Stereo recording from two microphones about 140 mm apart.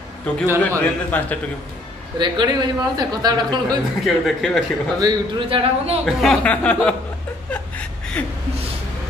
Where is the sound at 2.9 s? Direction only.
30° right (ahead or behind).